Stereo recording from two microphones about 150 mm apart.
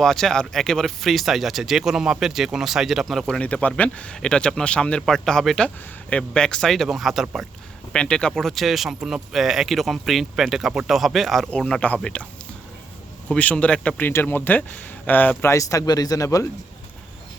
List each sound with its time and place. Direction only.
0.0 s speech: 5° left (ahead or behind); by 16.5 s 20° left (ahead or behind)